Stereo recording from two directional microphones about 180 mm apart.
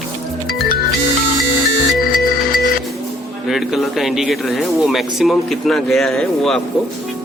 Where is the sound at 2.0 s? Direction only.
50° left (ahead or behind).